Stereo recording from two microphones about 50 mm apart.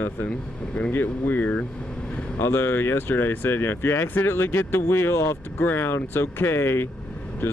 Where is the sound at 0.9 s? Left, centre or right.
Left.